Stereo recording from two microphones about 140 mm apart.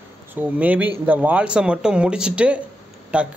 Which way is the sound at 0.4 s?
10° right (ahead or behind).